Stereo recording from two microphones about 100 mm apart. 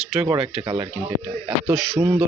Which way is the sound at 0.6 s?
60° right (ahead or behind).